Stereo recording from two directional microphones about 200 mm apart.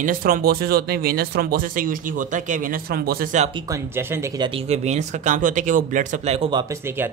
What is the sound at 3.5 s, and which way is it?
Speech, 15° right (ahead or behind).